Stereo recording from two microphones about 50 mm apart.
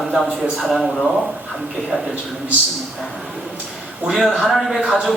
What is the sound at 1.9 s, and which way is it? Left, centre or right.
Speech, centre.